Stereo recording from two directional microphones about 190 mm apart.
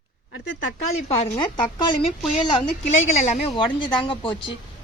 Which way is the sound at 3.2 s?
25° left (ahead or behind).